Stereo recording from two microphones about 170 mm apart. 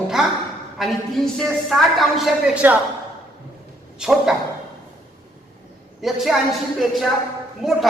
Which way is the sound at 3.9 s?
5° right (ahead or behind).